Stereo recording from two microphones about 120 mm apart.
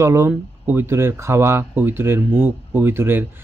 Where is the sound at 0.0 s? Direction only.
25° right (ahead or behind).